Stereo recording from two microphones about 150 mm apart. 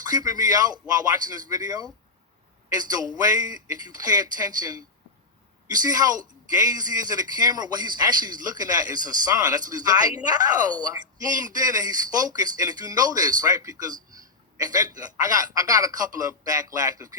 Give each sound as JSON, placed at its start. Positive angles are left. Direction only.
{"t": 0.0, "sound": "a man's voice", "side_deg": -25}